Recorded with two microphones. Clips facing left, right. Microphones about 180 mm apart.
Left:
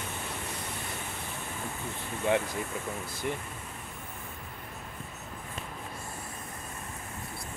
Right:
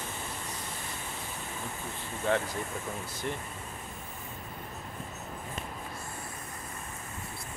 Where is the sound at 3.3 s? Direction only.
10° left (ahead or behind).